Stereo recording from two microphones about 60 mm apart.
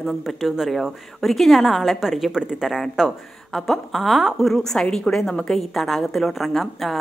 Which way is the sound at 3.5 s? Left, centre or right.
Centre.